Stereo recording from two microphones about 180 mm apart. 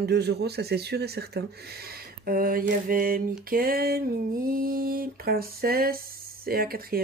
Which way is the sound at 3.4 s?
55° right (ahead or behind).